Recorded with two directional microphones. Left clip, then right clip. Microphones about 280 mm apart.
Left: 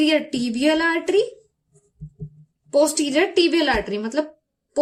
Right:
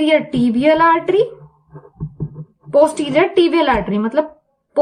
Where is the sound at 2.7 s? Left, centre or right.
Left.